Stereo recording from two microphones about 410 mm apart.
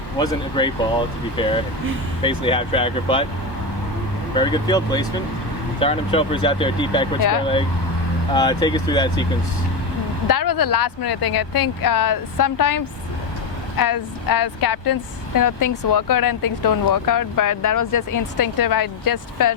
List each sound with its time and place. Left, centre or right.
0.2 s speech: centre
4.4 s speech: centre
8.3 s speech: centre
10.2 s speech: left